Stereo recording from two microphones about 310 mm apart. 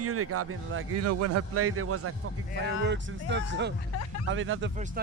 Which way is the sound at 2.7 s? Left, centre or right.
Right.